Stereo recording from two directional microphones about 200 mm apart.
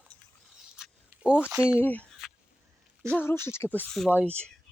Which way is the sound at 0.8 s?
5° right (ahead or behind).